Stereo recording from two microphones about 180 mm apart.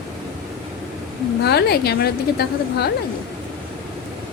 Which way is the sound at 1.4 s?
65° left (ahead or behind).